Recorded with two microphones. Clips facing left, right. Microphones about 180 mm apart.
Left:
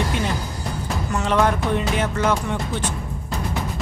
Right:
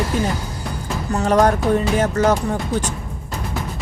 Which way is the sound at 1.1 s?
40° right (ahead or behind).